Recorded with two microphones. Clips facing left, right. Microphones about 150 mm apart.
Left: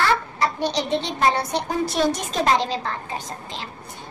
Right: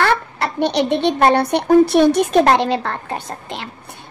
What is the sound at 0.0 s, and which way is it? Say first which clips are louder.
A woman's voice: right 3 dB; 60° right (ahead or behind).